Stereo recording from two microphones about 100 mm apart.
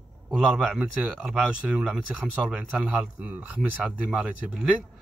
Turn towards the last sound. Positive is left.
turn(degrees=-5)  # may be behind; listen again after turning